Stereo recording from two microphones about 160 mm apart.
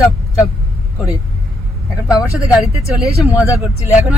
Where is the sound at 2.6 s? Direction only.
40° left (ahead or behind).